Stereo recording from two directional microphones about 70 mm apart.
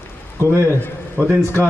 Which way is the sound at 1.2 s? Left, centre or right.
Centre.